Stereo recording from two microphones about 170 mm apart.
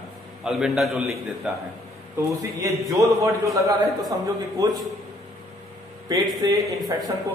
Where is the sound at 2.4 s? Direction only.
20° right (ahead or behind).